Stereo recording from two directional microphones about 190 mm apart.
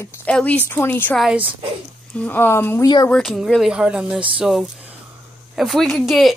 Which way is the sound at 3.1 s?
Centre (ahead or behind).